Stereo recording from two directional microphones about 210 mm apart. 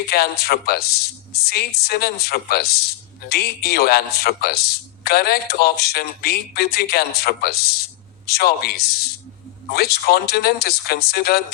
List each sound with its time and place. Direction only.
0.1 s a man's voice: 50° left (ahead or behind)